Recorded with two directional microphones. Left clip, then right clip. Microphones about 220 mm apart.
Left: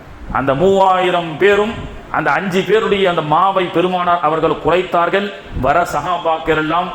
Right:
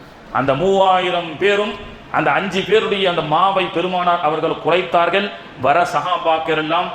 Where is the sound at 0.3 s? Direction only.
30° left (ahead or behind).